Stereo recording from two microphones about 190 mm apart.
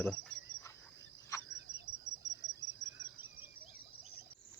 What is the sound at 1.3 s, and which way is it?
Bird, 15° left (ahead or behind).